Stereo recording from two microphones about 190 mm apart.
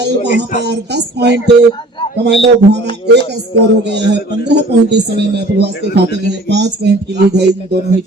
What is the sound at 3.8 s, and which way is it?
A man's voice, 65° right (ahead or behind).